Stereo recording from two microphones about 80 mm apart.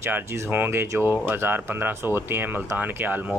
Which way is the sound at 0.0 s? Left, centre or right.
Right.